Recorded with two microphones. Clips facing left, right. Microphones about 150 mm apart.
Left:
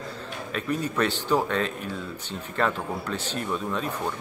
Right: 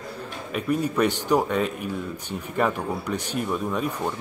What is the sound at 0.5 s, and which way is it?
Speech, 10° right (ahead or behind).